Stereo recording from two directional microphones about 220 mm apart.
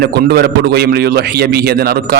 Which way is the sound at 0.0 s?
45° right (ahead or behind).